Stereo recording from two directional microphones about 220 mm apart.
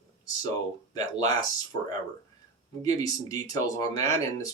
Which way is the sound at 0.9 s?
15° left (ahead or behind).